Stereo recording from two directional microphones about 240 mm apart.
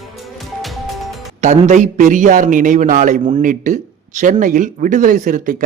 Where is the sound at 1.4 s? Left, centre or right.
Right.